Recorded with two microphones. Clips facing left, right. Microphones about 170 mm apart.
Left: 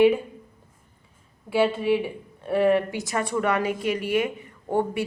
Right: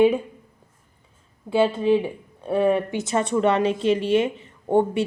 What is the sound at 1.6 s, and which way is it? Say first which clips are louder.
A woman's voice: right 3 dB; 25° right (ahead or behind).